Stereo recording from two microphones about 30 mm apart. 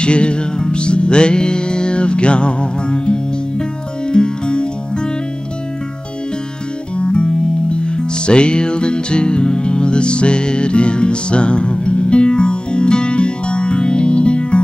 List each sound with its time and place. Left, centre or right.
0.0 s music: left
7.0 s music: left